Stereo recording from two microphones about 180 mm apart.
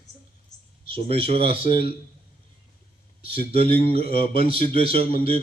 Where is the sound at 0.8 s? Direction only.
30° right (ahead or behind).